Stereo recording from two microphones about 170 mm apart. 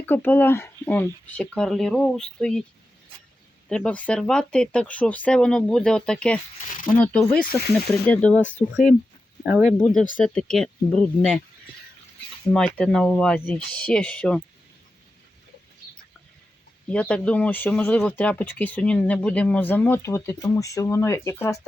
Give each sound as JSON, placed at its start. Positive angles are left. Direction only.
{"t": 0.0, "sound": "speech", "side_deg": 10}
{"t": 3.7, "sound": "speech", "side_deg": 5}
{"t": 8.6, "sound": "speech", "side_deg": 35}
{"t": 9.4, "sound": "speech", "side_deg": -10}
{"t": 9.7, "sound": "speech", "side_deg": 5}
{"t": 12.5, "sound": "speech", "side_deg": 5}
{"t": 16.9, "sound": "speech", "side_deg": 5}